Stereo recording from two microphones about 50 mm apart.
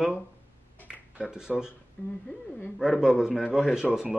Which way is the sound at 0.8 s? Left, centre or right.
Centre.